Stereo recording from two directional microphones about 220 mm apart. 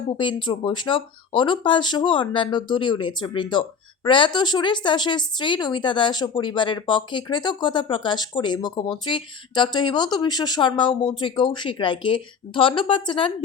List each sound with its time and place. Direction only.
0.2 s speech: 20° left (ahead or behind)